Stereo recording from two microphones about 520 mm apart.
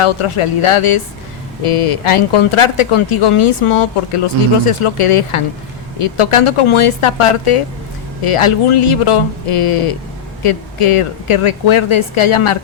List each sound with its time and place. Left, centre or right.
0.0 s speech: left